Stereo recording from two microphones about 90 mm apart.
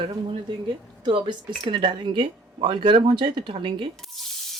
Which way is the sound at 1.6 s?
70° right (ahead or behind).